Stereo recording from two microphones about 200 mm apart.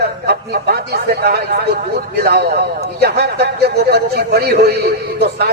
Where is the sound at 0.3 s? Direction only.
50° right (ahead or behind).